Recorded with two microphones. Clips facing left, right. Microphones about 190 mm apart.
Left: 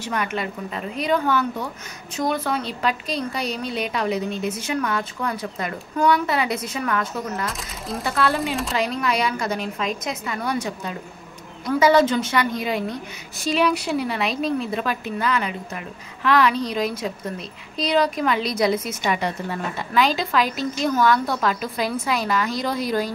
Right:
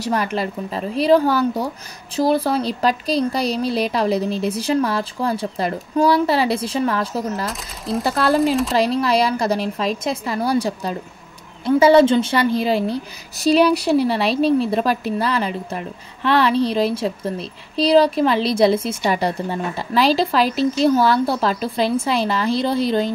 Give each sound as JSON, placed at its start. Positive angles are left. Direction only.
{"t": 0.0, "sound": "a woman's voice", "side_deg": -35}
{"t": 7.4, "sound": "speech", "side_deg": 0}
{"t": 8.0, "sound": "a woman's voice", "side_deg": -35}